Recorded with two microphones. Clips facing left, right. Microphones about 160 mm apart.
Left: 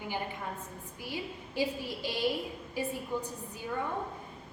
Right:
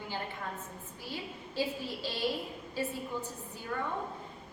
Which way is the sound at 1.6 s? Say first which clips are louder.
Left 2 dB; 15° left (ahead or behind).